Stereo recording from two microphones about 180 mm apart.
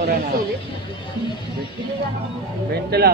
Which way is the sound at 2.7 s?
65° right (ahead or behind).